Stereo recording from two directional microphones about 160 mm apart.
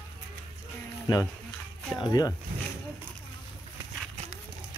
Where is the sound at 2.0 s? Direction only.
25° left (ahead or behind).